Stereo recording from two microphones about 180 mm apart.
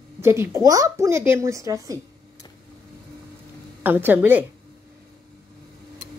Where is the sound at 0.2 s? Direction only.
15° right (ahead or behind).